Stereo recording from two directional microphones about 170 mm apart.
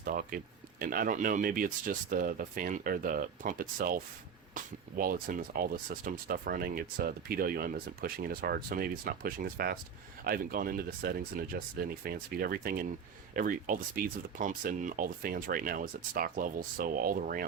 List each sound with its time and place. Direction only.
0.0 s speech: 55° right (ahead or behind)